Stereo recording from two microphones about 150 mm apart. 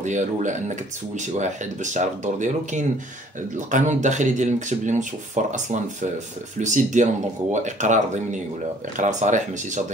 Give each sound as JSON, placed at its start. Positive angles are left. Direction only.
{"t": 0.0, "sound": "speech", "side_deg": -55}